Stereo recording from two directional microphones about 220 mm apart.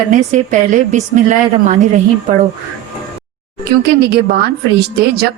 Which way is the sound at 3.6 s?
45° right (ahead or behind).